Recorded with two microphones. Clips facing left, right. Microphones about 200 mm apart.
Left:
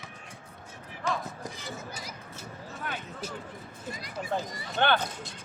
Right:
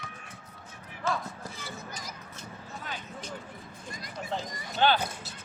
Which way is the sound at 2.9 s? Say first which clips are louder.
Left 3 dB; 60° left (ahead or behind).